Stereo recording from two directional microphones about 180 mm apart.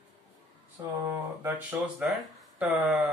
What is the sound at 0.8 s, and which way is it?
Speech, 20° right (ahead or behind).